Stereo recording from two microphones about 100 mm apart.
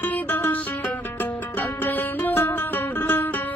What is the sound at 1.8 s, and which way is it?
Music, 20° left (ahead or behind).